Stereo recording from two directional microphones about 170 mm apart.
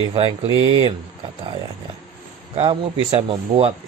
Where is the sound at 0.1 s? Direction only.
35° right (ahead or behind).